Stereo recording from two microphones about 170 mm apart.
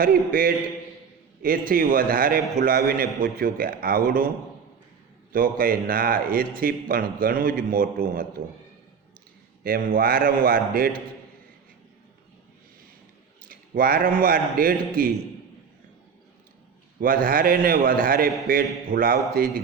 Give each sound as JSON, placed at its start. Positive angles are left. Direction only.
{"t": 0.0, "sound": "a man's voice", "side_deg": -60}
{"t": 5.3, "sound": "a man's voice", "side_deg": -55}
{"t": 9.6, "sound": "a man's voice", "side_deg": -60}
{"t": 13.5, "sound": "a man's voice", "side_deg": -60}
{"t": 17.0, "sound": "a man's voice", "side_deg": -55}